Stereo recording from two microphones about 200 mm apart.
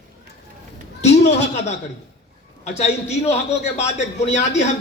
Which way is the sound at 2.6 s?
35° left (ahead or behind).